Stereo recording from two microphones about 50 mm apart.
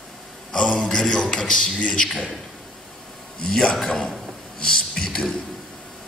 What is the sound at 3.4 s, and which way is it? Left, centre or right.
A man's voice, centre.